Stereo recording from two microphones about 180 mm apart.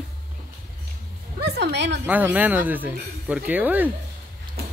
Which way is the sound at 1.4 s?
70° right (ahead or behind).